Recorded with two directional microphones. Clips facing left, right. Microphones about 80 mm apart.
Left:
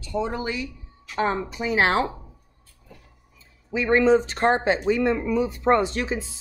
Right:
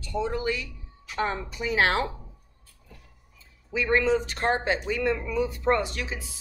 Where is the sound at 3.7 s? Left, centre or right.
Left.